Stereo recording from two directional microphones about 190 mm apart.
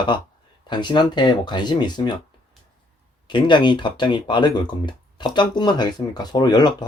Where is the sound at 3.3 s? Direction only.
25° left (ahead or behind).